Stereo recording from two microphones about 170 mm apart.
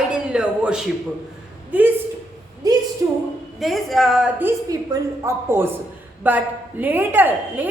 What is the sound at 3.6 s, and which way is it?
A woman's voice, centre (ahead or behind).